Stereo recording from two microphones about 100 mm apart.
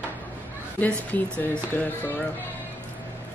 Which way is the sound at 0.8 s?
15° left (ahead or behind).